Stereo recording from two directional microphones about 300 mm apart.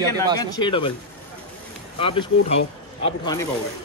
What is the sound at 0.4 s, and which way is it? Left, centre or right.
Speech, centre.